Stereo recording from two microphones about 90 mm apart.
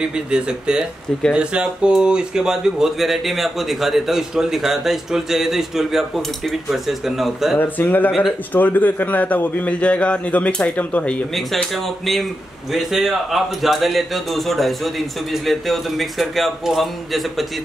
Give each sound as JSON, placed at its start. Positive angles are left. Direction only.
{"t": 0.0, "sound": "speech", "side_deg": -10}
{"t": 7.5, "sound": "a man's voice", "side_deg": 20}
{"t": 11.3, "sound": "speech", "side_deg": 0}